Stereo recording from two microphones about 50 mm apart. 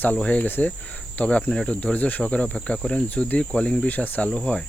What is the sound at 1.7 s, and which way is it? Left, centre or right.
Speech, left.